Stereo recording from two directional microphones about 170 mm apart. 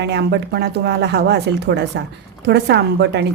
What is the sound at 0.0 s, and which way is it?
Speech, 90° right.